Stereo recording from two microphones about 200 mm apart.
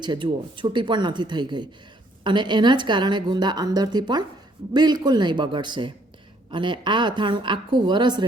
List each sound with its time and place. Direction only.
0.0 s a woman's voice: 25° right (ahead or behind)